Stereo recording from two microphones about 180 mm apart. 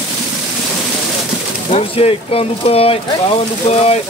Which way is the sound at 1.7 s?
35° left (ahead or behind).